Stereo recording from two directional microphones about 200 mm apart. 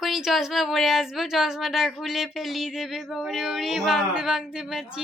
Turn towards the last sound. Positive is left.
turn(degrees=0)  # may be behind; listen again after turning